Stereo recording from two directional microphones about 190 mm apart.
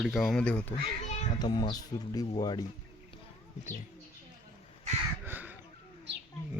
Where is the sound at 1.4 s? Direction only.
20° left (ahead or behind).